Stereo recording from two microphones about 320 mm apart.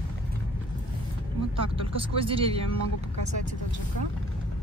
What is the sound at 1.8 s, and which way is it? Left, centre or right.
Speech, centre.